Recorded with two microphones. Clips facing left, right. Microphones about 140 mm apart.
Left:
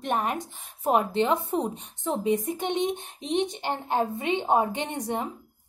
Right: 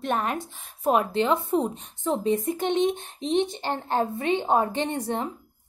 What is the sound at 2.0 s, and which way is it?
A woman's voice, 15° left (ahead or behind).